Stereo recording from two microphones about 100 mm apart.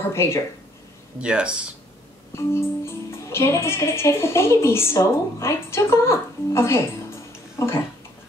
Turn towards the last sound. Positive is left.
turn(degrees=25)  # may be behind; listen again after turning